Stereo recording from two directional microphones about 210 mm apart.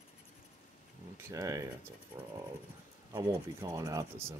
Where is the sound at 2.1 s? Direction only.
5° right (ahead or behind).